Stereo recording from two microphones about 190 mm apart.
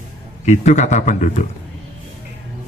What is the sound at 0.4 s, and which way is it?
Speech, 40° left (ahead or behind).